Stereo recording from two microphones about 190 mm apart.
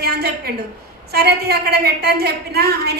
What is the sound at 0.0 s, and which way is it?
A woman's voice, 55° right (ahead or behind).